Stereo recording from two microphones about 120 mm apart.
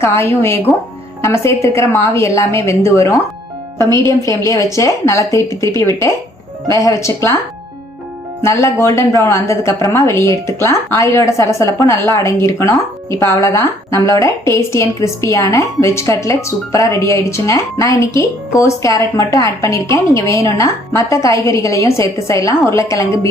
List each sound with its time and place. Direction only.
0.0 s a woman's voice: 20° left (ahead or behind)
8.4 s a woman's voice: 20° left (ahead or behind)